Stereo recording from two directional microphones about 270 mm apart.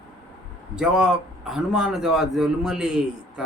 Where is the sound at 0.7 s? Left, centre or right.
Centre.